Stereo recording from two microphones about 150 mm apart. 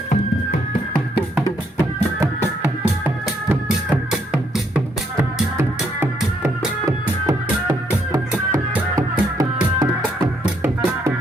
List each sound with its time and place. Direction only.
3.5 s music: 5° right (ahead or behind)